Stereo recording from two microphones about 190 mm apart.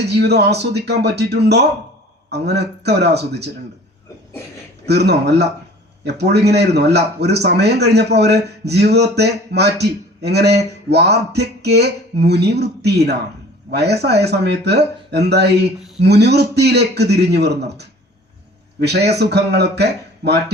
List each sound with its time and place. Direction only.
0.0 s speech: 60° right (ahead or behind)
4.9 s speech: 60° right (ahead or behind)